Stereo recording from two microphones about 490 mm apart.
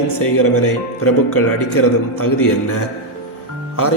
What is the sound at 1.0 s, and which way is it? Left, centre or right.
A man's voice, left.